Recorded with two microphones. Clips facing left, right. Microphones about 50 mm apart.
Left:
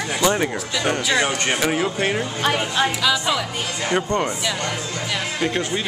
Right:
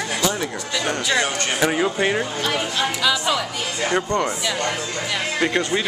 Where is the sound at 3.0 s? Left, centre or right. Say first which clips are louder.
Even; centre.